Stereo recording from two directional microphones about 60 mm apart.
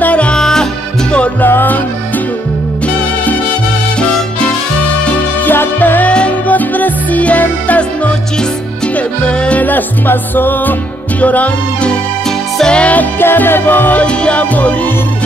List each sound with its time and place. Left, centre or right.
0.0 s music: left
0.4 s music: centre
1.4 s music: left
5.4 s music: left
9.5 s music: left
12.5 s music: centre
13.2 s music: left
14.0 s music: centre